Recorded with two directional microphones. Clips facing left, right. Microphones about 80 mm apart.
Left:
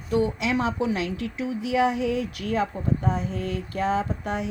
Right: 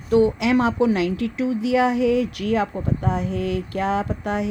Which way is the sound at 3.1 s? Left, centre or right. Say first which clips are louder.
Right 4 dB; right.